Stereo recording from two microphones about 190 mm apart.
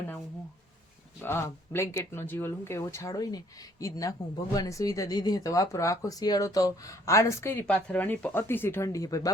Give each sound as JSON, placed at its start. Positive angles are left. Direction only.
{"t": 1.2, "sound": "speech", "side_deg": 15}